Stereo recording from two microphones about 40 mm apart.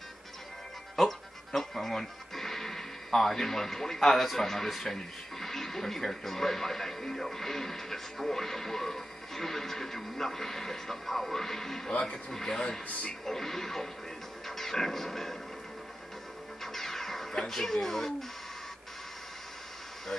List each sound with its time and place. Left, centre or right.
0.9 s music: centre
4.6 s speech: centre
11.9 s speech: left
12.3 s speech: centre
14.6 s music: centre
16.6 s music: centre
17.5 s speech: centre